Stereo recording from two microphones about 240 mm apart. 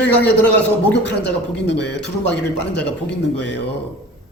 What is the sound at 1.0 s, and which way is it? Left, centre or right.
A man's voice, left.